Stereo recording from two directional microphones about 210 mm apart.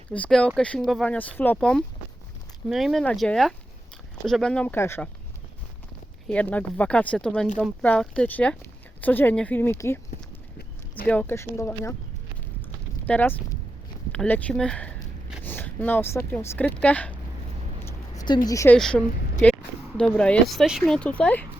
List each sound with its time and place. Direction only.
0.1 s speech: 5° left (ahead or behind)
6.2 s speech: 5° left (ahead or behind)
10.6 s a sound: 45° left (ahead or behind)
11.1 s speech: 10° left (ahead or behind)
13.1 s speech: 10° left (ahead or behind)
18.4 s speech: 15° left (ahead or behind)